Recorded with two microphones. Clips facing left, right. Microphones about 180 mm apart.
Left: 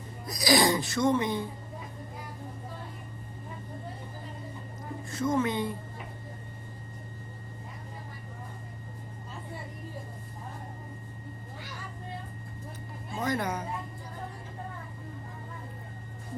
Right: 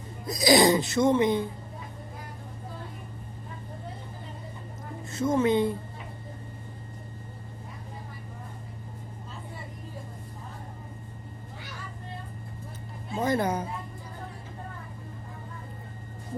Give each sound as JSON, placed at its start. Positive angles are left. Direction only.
{"t": 0.3, "sound": "speech", "side_deg": -25}
{"t": 5.0, "sound": "a woman's voice", "side_deg": -25}
{"t": 13.1, "sound": "speech", "side_deg": -30}